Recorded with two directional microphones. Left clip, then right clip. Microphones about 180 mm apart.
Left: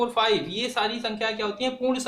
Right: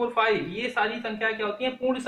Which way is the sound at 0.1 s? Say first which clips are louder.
Left 1 dB; 40° left (ahead or behind).